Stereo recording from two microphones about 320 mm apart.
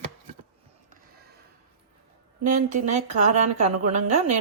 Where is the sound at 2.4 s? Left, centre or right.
Right.